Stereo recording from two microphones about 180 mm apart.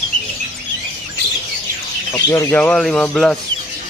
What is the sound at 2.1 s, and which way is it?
Speech, 15° left (ahead or behind).